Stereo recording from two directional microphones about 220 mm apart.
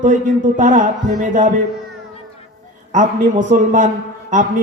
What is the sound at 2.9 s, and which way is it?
A man's voice, 35° right (ahead or behind).